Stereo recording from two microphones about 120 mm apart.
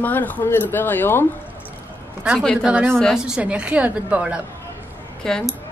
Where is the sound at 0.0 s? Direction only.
15° left (ahead or behind).